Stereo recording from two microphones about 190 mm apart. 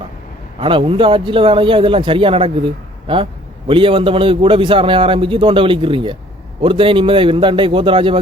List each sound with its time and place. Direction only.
0.6 s a man's voice: 25° right (ahead or behind)